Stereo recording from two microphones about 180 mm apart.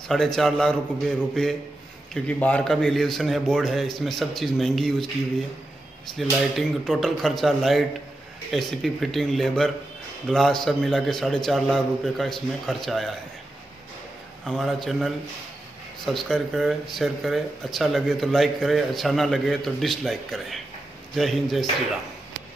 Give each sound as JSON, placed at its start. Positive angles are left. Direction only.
{"t": 0.1, "sound": "a man's voice", "side_deg": 0}
{"t": 6.1, "sound": "a man's voice", "side_deg": 0}
{"t": 14.4, "sound": "a man's voice", "side_deg": 0}